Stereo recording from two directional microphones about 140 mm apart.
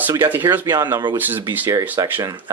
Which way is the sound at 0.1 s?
15° right (ahead or behind).